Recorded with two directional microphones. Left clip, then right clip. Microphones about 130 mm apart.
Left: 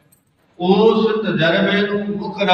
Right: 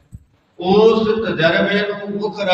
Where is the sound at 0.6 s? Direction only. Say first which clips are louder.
Right 1 dB; 40° right (ahead or behind).